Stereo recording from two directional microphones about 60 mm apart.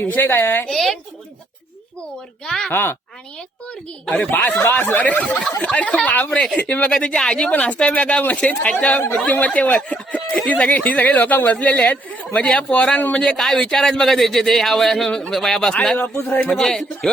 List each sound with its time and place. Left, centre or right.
0.0 s a woman's voice: left
0.7 s a woman's voice: centre
2.4 s speech: centre
2.7 s a woman's voice: left
4.3 s a woman's voice: left
6.9 s speech: centre
16.1 s a woman's voice: left
16.5 s speech: centre